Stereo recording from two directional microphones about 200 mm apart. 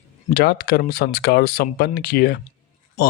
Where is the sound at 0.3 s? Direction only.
50° left (ahead or behind).